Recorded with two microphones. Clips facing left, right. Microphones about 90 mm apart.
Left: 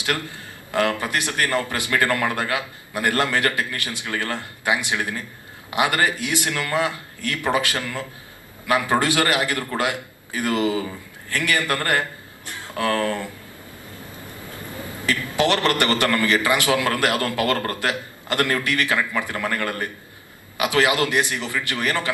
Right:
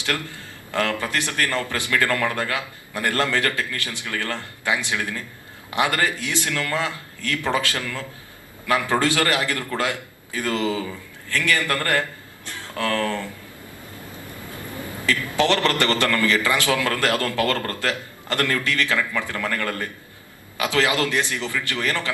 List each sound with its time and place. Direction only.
0.0 s a man's voice: 20° left (ahead or behind)
15.0 s a man's voice: 20° left (ahead or behind)